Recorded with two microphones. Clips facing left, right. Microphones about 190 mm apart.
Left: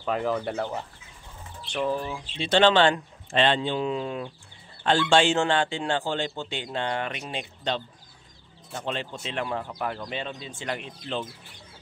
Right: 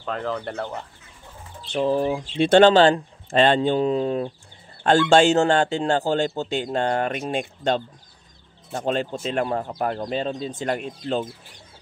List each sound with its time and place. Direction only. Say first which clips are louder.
0.0 s speech: left 1 dB; 10° left (ahead or behind)
1.7 s speech: right 6 dB; 30° right (ahead or behind)
2.0 s speech: right 10 dB; 50° right (ahead or behind)